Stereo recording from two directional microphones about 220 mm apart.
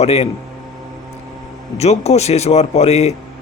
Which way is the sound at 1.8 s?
30° left (ahead or behind).